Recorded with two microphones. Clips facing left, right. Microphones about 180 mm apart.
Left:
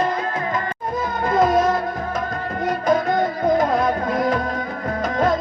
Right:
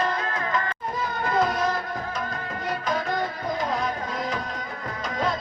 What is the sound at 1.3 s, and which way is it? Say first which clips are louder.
Music: left 8 dB; 50° left (ahead or behind).